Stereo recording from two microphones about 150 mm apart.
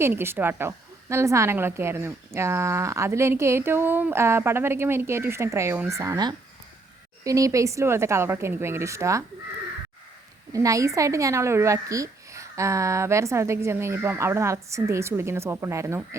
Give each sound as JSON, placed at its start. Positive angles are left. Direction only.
{"t": 0.0, "sound": "speech", "side_deg": -15}
{"t": 10.5, "sound": "speech", "side_deg": -20}